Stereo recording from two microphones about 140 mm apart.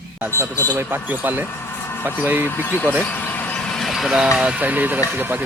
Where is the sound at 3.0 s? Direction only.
10° left (ahead or behind); by 5.0 s 10° right (ahead or behind).